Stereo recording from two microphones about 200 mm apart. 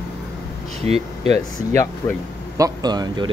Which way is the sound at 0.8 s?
30° right (ahead or behind).